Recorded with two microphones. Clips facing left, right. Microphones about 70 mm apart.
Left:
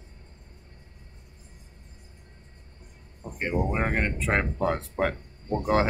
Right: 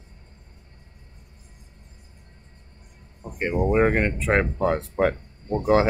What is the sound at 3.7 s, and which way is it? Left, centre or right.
Speech, right.